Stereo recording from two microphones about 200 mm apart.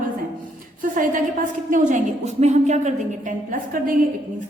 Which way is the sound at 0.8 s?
40° right (ahead or behind).